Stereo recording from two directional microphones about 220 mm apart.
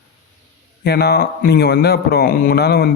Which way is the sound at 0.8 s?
45° left (ahead or behind).